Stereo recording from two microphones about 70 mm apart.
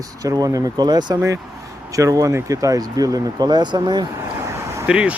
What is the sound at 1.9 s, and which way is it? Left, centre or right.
Speech, right.